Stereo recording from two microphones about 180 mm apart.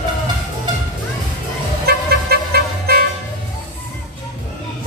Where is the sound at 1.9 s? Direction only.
60° right (ahead or behind).